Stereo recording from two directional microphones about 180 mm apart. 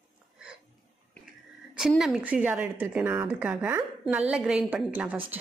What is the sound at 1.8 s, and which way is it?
A woman's voice, centre (ahead or behind).